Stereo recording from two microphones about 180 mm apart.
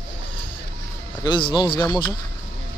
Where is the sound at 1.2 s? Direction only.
25° left (ahead or behind).